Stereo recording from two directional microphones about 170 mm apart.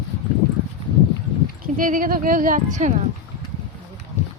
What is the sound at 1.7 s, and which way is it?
Speech, 55° right (ahead or behind).